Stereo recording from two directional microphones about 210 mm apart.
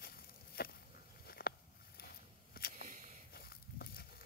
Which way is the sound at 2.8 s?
40° right (ahead or behind).